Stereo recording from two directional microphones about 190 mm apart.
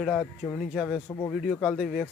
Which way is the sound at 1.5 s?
5° left (ahead or behind).